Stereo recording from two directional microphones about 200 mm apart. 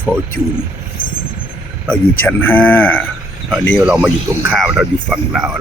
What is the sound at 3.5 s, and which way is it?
Speech, centre (ahead or behind).